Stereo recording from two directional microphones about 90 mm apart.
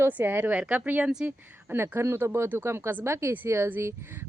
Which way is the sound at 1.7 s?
25° right (ahead or behind).